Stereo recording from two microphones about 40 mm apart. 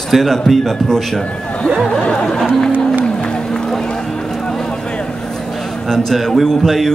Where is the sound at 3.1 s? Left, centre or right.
Left.